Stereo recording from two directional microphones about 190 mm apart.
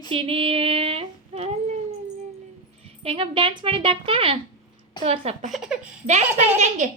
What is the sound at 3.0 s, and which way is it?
Speech, 30° right (ahead or behind).